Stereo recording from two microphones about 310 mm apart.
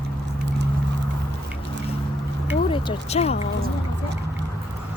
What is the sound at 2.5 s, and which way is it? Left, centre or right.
Speech, centre.